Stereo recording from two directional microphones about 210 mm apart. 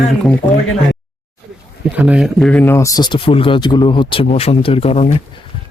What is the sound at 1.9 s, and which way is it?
Speech, 5° right (ahead or behind).